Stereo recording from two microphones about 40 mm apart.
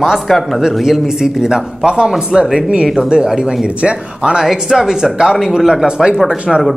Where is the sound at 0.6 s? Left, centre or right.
Centre.